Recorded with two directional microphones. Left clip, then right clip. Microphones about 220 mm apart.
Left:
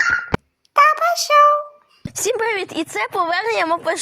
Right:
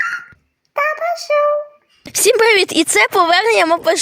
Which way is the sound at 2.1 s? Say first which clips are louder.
Right 9 dB; 40° right (ahead or behind).